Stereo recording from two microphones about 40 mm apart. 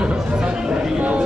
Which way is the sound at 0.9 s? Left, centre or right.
Right.